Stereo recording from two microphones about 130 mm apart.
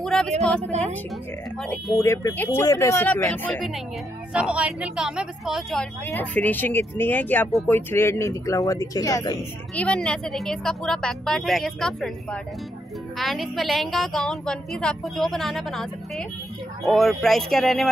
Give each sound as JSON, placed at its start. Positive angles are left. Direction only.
{"t": 0.0, "sound": "speech", "side_deg": 5}
{"t": 0.7, "sound": "a woman's voice", "side_deg": -60}
{"t": 2.0, "sound": "speech", "side_deg": 20}
{"t": 3.1, "sound": "speech", "side_deg": 15}
{"t": 4.3, "sound": "a woman's voice", "side_deg": -10}
{"t": 6.1, "sound": "speech", "side_deg": 15}
{"t": 9.8, "sound": "a woman's voice", "side_deg": 5}